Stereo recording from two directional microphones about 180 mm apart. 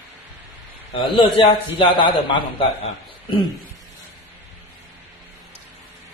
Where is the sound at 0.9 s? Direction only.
30° left (ahead or behind).